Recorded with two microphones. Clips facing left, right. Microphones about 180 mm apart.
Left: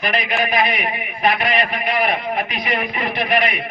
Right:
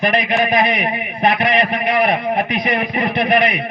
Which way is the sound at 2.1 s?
50° right (ahead or behind).